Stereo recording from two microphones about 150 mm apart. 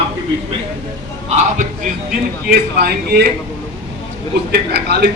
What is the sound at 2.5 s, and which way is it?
Speech, 90° right.